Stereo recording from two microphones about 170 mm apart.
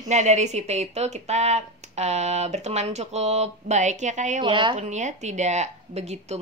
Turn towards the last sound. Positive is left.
turn(degrees=-40)  # may be behind; listen again after turning